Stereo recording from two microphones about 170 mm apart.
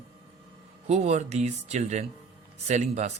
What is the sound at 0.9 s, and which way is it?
Speech, 40° right (ahead or behind).